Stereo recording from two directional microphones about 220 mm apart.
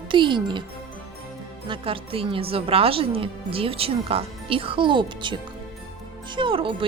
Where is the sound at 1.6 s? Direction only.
25° right (ahead or behind).